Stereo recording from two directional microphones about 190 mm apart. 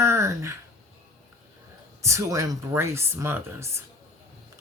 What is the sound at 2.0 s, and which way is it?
Speech, 15° right (ahead or behind).